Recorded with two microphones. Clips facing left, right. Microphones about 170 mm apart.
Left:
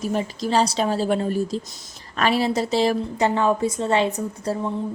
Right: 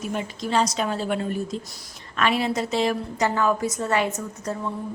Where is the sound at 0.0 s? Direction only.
35° left (ahead or behind).